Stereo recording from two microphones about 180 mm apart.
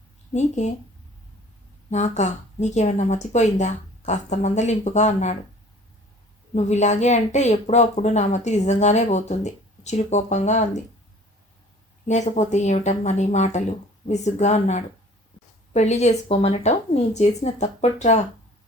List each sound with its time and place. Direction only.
0.3 s speech: 40° left (ahead or behind)
1.9 s speech: 40° left (ahead or behind)
6.5 s speech: 40° left (ahead or behind)
12.0 s speech: 40° left (ahead or behind)